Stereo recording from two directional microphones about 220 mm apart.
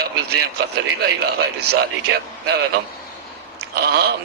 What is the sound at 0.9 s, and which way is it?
Speech, 45° right (ahead or behind).